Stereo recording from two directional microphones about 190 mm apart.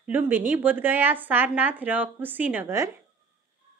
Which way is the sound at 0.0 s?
10° right (ahead or behind).